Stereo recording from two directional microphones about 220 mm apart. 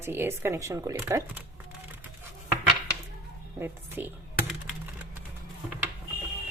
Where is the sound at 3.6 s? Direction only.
10° right (ahead or behind).